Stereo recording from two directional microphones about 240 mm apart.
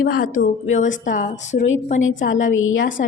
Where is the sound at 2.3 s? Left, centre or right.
Left.